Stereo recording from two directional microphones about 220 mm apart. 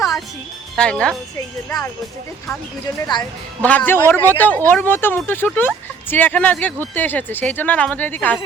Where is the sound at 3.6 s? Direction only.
5° left (ahead or behind).